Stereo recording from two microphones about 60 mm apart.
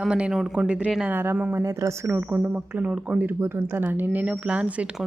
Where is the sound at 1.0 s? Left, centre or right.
Right.